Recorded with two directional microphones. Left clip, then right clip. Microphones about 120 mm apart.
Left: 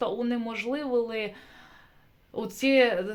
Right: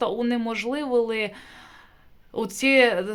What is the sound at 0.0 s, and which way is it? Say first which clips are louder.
Speech: right 4 dB; 35° right (ahead or behind).